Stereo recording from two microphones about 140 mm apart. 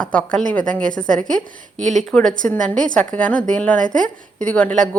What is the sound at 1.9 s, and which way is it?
Speech, 5° left (ahead or behind).